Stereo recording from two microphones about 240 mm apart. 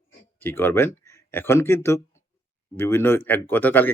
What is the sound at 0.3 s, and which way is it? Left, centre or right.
Speech, centre.